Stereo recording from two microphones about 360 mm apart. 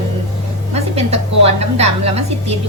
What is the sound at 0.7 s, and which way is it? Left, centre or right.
A woman's voice, centre.